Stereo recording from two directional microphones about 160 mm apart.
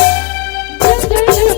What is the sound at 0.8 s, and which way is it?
Music, 10° left (ahead or behind).